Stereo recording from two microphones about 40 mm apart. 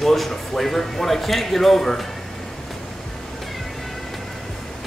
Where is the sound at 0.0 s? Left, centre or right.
Centre.